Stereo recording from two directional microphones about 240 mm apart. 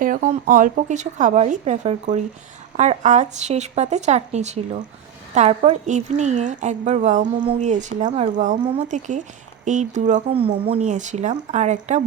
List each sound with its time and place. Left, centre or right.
0.0 s a woman's voice: right